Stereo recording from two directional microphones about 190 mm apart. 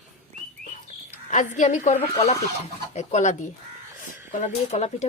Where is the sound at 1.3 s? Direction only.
40° left (ahead or behind).